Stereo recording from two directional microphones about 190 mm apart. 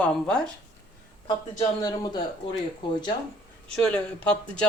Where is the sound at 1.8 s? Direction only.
20° left (ahead or behind).